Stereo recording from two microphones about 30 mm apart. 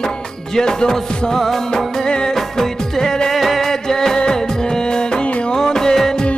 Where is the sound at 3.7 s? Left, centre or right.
Centre.